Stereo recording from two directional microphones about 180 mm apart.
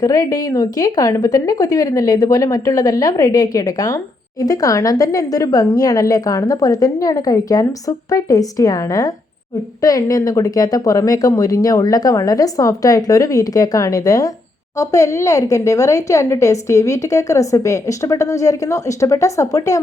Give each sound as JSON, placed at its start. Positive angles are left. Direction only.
{"t": 0.0, "sound": "a woman's voice", "side_deg": 20}